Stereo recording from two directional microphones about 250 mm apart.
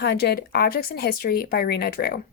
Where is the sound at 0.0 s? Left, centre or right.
Left.